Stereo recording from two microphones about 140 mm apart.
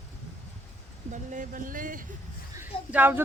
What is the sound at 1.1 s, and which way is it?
Speech, 65° right (ahead or behind).